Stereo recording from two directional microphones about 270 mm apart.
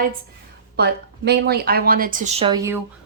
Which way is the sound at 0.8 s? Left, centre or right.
Right.